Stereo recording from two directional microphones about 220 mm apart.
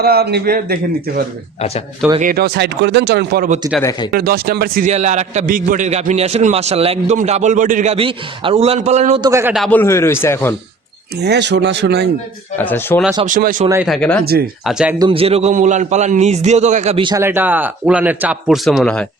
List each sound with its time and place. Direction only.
0.0 s a man's voice: 45° right (ahead or behind); by 9.3 s 30° right (ahead or behind)
9.3 s a man's voice: 10° right (ahead or behind)
9.6 s speech: 5° left (ahead or behind)
11.2 s speech: 50° right (ahead or behind)
12.5 s speech: 10° left (ahead or behind)
13.2 s a man's voice: 35° right (ahead or behind)
13.8 s speech: 5° left (ahead or behind)
14.9 s a man's voice: 20° right (ahead or behind)
17.2 s speech: 10° right (ahead or behind)